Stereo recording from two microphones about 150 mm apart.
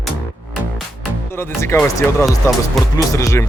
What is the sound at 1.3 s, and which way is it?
Speech, 15° left (ahead or behind).